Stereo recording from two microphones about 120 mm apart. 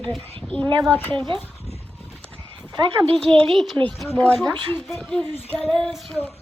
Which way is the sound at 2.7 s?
35° right (ahead or behind).